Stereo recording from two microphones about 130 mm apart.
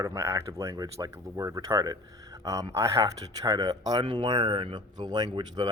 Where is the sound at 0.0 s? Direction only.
25° right (ahead or behind).